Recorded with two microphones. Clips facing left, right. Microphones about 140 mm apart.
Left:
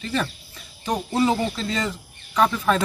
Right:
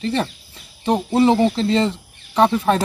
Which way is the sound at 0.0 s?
30° right (ahead or behind).